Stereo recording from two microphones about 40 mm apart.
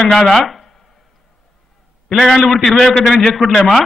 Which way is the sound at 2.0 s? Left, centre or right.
Centre.